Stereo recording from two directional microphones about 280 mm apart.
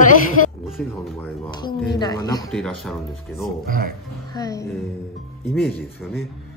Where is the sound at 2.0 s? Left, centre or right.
Centre.